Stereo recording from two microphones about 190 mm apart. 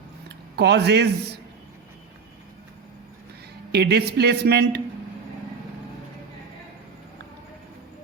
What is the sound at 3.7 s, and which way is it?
A man's voice, 60° right (ahead or behind).